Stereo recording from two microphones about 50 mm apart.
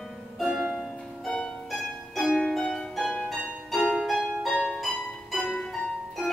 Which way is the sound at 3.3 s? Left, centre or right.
Centre.